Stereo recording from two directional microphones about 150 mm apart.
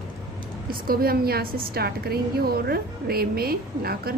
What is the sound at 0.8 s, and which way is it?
A woman's voice, 80° right.